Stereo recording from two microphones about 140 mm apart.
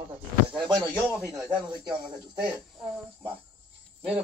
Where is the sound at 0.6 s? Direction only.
35° right (ahead or behind).